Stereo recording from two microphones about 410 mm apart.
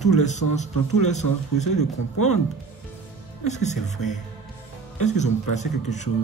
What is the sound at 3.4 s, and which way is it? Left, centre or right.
Speech, centre.